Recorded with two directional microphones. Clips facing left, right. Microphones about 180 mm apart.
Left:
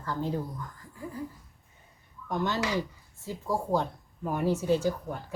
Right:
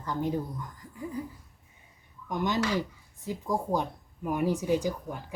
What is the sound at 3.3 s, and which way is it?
Speech, 15° right (ahead or behind).